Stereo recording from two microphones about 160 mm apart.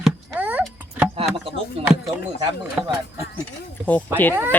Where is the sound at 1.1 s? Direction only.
35° right (ahead or behind).